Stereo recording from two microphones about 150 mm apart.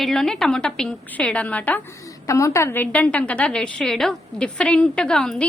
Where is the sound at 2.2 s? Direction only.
20° left (ahead or behind).